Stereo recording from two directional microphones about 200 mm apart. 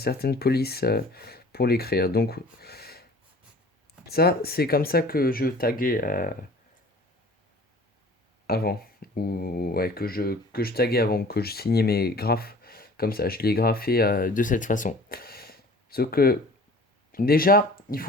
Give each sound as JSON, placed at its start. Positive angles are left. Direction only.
{"t": 0.0, "sound": "speech", "side_deg": 50}
{"t": 4.0, "sound": "speech", "side_deg": 50}
{"t": 8.4, "sound": "speech", "side_deg": 50}